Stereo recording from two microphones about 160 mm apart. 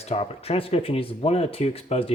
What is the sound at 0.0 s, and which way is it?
Speech, 40° left (ahead or behind).